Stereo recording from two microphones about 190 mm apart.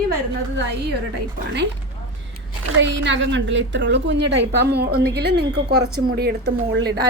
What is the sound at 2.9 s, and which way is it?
A woman's voice, 75° right (ahead or behind).